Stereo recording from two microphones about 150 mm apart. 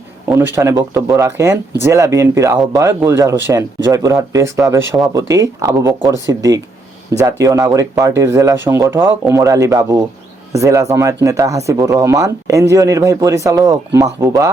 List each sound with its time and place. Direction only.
0.3 s speech: 15° right (ahead or behind)